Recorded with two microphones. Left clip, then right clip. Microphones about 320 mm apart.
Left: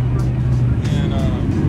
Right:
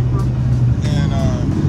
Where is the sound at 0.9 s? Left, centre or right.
Centre.